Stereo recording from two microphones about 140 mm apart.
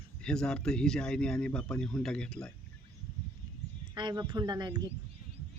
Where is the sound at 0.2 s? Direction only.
5° left (ahead or behind).